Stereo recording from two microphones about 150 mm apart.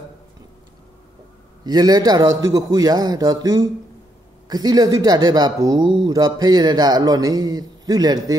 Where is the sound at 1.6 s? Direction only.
25° right (ahead or behind).